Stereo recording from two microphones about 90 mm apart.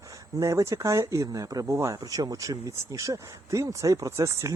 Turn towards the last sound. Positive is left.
turn(degrees=-35)  # may be behind; listen again after turning